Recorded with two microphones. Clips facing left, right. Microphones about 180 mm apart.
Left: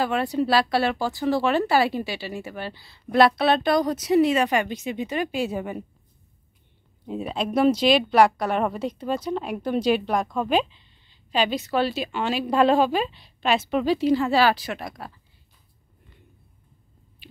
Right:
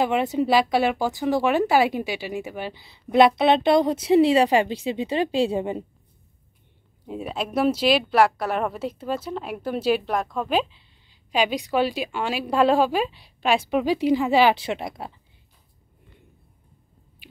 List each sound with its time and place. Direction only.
0.0 s speech: 20° right (ahead or behind)
7.1 s speech: 5° right (ahead or behind); by 15.1 s 25° right (ahead or behind)